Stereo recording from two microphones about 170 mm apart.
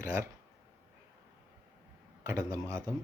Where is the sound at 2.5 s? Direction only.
20° right (ahead or behind).